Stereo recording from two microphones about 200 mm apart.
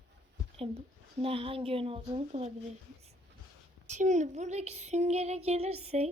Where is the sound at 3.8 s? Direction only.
35° right (ahead or behind).